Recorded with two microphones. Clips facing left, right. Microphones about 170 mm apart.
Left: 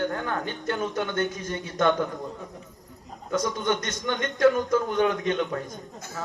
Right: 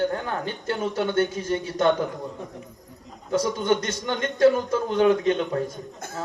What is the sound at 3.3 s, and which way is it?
A man's voice, 30° right (ahead or behind).